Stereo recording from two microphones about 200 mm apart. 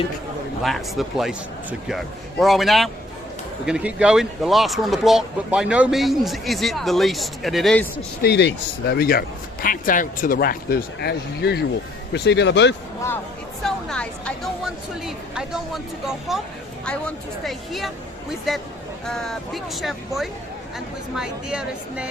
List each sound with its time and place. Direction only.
0.6 s speech: centre (ahead or behind)
8.2 s a man's voice: 55° left (ahead or behind)
13.6 s speech: 5° left (ahead or behind)